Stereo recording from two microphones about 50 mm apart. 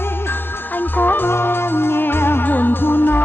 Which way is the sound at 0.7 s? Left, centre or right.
Left.